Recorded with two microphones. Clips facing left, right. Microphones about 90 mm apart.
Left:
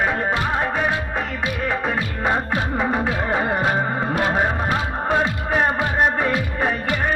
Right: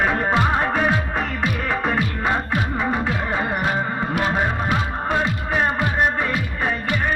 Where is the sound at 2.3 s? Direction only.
20° left (ahead or behind).